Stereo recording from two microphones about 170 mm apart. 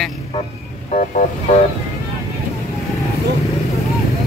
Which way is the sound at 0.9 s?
50° left (ahead or behind).